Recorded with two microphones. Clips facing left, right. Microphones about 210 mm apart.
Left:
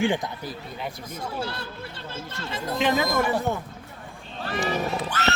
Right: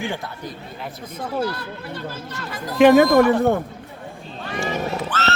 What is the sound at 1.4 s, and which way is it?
Speech, 25° left (ahead or behind).